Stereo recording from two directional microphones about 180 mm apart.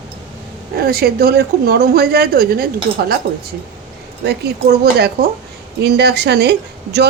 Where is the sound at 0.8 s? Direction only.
60° right (ahead or behind).